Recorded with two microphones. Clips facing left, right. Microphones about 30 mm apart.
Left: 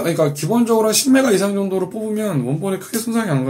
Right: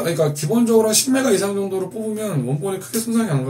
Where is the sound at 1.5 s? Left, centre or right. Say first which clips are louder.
Left 2 dB; centre.